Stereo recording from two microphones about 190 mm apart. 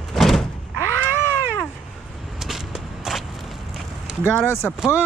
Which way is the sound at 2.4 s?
Centre (ahead or behind).